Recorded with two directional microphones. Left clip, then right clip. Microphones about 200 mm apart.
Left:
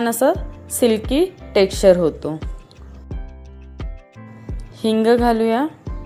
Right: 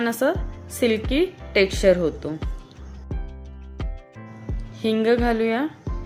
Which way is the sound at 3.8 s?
Centre (ahead or behind).